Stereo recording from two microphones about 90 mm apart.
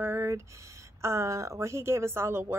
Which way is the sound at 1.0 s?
30° right (ahead or behind).